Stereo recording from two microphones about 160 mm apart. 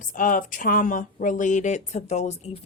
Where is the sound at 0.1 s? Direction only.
55° left (ahead or behind).